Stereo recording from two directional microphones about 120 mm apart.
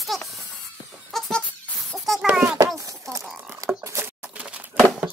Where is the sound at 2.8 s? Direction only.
25° right (ahead or behind).